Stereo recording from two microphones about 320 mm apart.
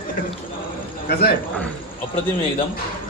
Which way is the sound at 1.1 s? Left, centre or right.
Left.